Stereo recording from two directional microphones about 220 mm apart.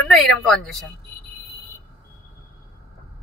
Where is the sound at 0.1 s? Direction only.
Centre (ahead or behind).